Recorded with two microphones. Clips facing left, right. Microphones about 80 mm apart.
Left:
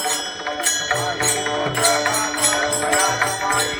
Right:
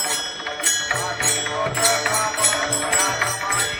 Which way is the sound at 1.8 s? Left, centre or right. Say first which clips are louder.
Left 4 dB; left.